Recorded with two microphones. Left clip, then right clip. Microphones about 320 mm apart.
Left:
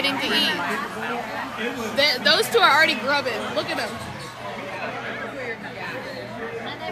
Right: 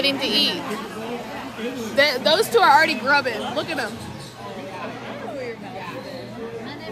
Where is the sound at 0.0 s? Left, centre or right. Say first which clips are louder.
Right 1 dB; centre.